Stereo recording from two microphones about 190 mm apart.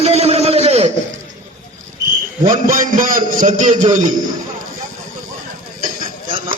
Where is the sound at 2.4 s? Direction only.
45° right (ahead or behind).